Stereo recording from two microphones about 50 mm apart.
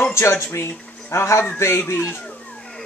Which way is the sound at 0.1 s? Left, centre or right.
Left.